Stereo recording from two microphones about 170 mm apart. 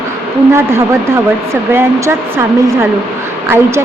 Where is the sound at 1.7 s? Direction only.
15° right (ahead or behind).